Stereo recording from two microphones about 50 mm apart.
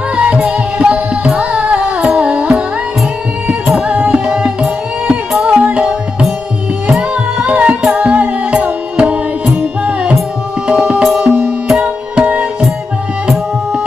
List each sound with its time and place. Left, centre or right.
0.1 s music: right
3.6 s music: centre
3.9 s music: right
4.3 s music: centre
5.5 s music: right